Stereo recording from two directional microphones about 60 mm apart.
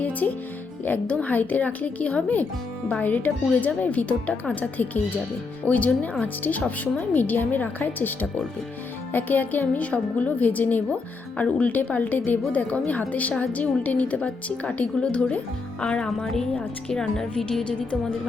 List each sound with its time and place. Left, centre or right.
0.0 s a woman's voice: left; by 17.6 s centre